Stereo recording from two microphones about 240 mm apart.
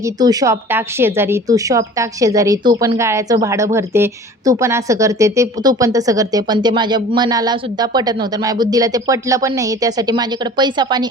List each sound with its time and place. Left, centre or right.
0.0 s speech: centre